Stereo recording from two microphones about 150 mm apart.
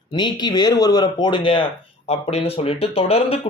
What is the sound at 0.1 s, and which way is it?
Speech, 30° left (ahead or behind).